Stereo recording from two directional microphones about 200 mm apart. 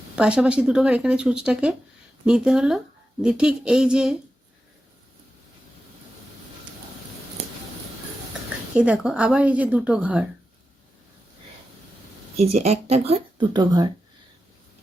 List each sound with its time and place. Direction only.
0.2 s a woman's voice: 5° right (ahead or behind)
8.7 s a woman's voice: 5° right (ahead or behind)
12.4 s speech: 30° right (ahead or behind)